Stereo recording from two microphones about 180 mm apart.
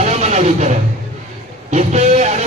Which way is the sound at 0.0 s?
40° right (ahead or behind).